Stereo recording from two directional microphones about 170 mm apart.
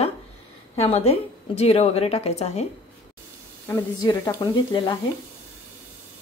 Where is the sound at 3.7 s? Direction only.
20° left (ahead or behind).